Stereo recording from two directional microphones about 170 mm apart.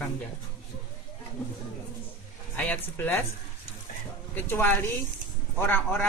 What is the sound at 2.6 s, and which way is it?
Speech, 10° left (ahead or behind).